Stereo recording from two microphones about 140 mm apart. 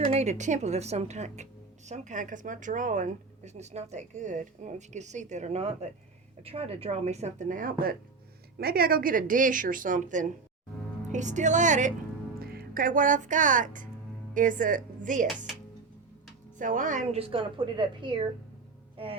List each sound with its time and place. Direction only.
0.0 s a woman's voice: 55° right (ahead or behind)
12.4 s speech: 90° right; by 15.3 s 65° right (ahead or behind)
16.6 s speech: 70° right (ahead or behind)
17.1 s a woman's voice: 40° right (ahead or behind)